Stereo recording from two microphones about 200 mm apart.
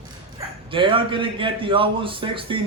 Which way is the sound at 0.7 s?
25° right (ahead or behind).